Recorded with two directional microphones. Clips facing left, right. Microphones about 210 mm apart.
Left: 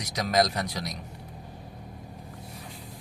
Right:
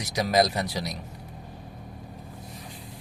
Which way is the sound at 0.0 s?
10° right (ahead or behind).